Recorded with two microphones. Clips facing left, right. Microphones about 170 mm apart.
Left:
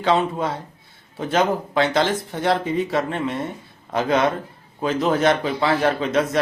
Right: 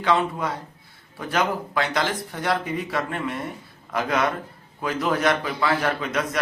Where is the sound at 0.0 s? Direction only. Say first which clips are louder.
Left 3 dB; 25° left (ahead or behind).